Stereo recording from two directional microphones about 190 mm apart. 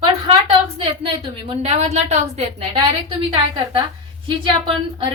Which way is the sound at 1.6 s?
35° right (ahead or behind).